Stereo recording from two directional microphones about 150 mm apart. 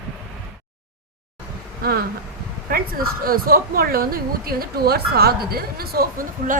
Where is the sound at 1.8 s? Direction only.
80° right.